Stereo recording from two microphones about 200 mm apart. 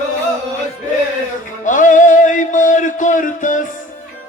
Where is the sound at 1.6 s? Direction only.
40° left (ahead or behind).